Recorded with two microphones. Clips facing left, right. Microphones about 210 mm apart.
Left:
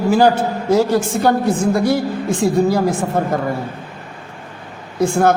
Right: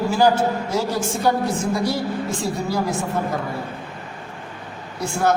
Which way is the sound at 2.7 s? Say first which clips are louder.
Left 6 dB; 55° left (ahead or behind).